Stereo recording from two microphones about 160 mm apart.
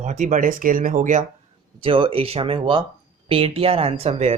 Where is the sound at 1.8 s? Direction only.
35° right (ahead or behind).